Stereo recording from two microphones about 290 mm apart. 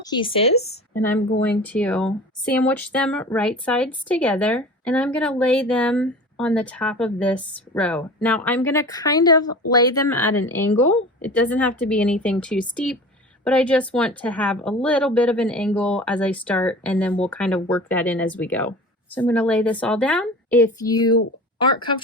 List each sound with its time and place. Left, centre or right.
0.0 s speech: centre
1.0 s speech: centre